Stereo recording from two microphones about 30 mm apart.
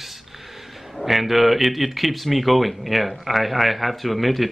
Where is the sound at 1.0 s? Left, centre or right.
Centre.